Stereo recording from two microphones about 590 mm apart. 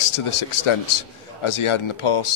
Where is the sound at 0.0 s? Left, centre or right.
Left.